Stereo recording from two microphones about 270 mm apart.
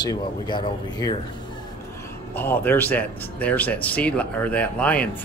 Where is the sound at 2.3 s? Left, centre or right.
Centre.